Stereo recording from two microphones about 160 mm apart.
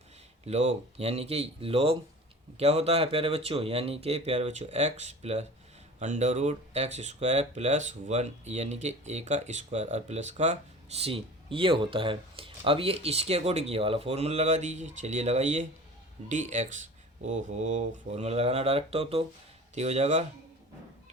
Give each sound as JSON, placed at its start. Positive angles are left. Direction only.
{"t": 0.4, "sound": "speech", "side_deg": -40}